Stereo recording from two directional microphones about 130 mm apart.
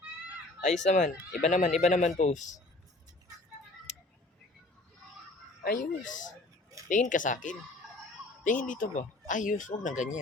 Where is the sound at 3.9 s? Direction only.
60° left (ahead or behind).